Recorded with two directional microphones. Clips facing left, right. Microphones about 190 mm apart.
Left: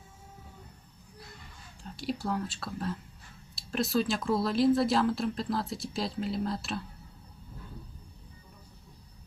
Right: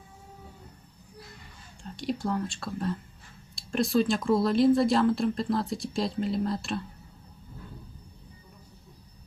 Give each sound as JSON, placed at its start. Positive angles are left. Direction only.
{"t": 1.8, "sound": "speech", "side_deg": 5}